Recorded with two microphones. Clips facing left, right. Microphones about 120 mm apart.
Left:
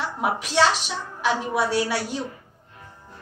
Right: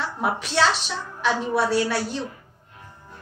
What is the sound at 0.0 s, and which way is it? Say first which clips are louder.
A woman's voice: even; 10° left (ahead or behind).